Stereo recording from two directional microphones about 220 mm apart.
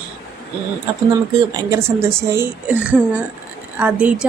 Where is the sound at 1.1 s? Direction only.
15° right (ahead or behind).